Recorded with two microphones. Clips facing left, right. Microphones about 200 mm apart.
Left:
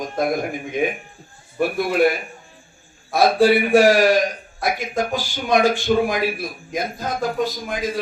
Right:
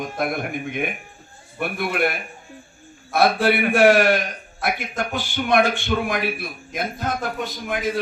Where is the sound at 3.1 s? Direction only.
60° right (ahead or behind).